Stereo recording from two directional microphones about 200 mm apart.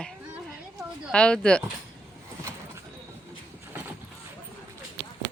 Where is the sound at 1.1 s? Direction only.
5° left (ahead or behind).